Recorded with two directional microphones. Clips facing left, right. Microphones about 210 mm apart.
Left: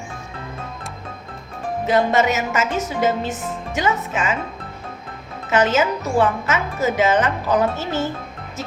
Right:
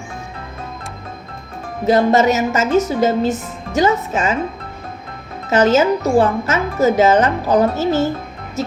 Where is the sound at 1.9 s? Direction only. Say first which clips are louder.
Right 5 dB; 40° right (ahead or behind).